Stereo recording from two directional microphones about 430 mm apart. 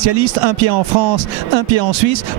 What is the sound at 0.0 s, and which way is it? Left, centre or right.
A man's voice, right.